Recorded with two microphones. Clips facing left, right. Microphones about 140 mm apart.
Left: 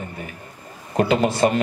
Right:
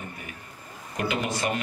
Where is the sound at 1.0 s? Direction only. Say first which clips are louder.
Left 10 dB; 35° left (ahead or behind).